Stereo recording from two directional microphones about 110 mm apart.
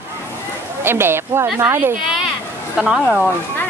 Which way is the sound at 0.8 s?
20° right (ahead or behind).